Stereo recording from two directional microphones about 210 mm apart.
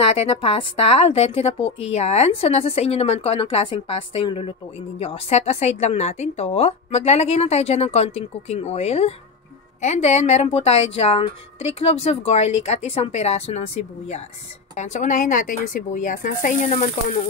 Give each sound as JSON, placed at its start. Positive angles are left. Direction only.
{"t": 0.1, "sound": "a woman's voice", "side_deg": 30}